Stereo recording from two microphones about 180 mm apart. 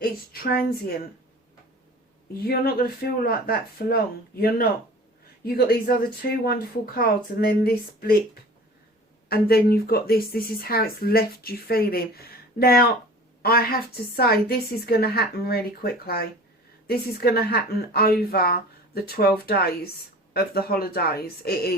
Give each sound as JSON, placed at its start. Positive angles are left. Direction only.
{"t": 0.0, "sound": "speech", "side_deg": 60}
{"t": 2.4, "sound": "speech", "side_deg": 60}
{"t": 9.3, "sound": "speech", "side_deg": 60}